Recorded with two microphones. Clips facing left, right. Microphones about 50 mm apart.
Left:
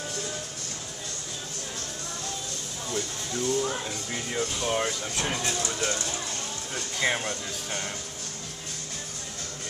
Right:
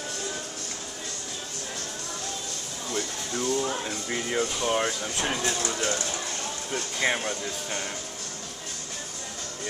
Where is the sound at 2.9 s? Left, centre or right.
Right.